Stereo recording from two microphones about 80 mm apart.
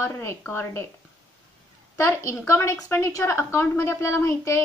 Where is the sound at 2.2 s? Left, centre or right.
Left.